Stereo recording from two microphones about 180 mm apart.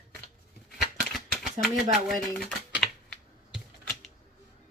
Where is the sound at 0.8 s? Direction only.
Centre (ahead or behind).